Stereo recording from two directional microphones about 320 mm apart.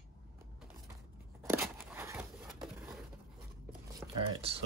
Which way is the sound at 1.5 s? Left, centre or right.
Centre.